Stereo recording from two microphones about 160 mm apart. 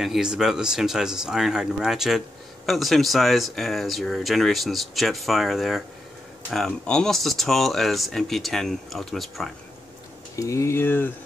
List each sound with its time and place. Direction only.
0.0 s speech: 5° right (ahead or behind)
10.3 s speech: 20° left (ahead or behind)